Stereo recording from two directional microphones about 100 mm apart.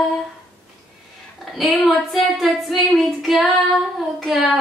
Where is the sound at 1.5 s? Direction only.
Centre (ahead or behind).